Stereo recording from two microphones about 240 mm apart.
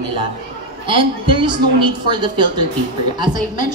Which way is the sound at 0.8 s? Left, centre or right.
Right.